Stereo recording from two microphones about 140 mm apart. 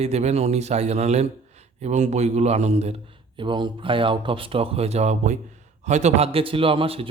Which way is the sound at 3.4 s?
35° right (ahead or behind).